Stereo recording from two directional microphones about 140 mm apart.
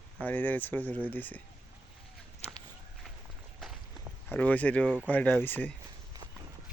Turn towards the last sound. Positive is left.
turn(degrees=15)  # may be behind; listen again after turning